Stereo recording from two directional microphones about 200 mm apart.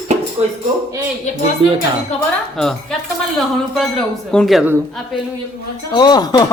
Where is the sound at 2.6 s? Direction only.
5° left (ahead or behind).